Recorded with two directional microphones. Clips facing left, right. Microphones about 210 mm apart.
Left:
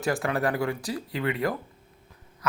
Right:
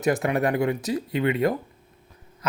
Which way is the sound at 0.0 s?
20° right (ahead or behind).